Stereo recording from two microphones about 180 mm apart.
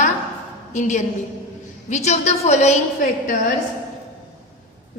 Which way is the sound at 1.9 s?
40° left (ahead or behind).